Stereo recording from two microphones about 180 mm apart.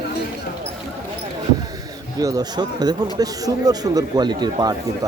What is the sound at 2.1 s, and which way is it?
Speech, 20° right (ahead or behind).